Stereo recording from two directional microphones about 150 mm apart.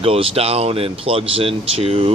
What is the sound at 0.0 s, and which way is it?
Speech, 40° right (ahead or behind).